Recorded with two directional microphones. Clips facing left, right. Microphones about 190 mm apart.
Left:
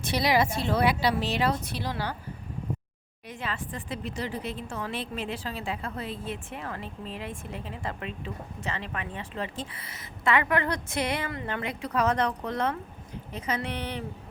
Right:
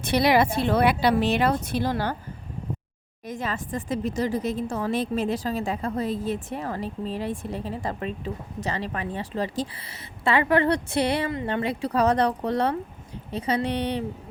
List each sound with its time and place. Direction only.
0.0 s speech: 60° right (ahead or behind)
3.2 s speech: 40° right (ahead or behind)